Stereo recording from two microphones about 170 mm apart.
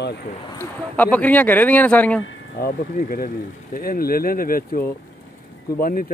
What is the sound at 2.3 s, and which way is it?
Speech, 60° left (ahead or behind).